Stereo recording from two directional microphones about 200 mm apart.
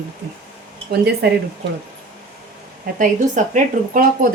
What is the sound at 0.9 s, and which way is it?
Speech, 55° right (ahead or behind).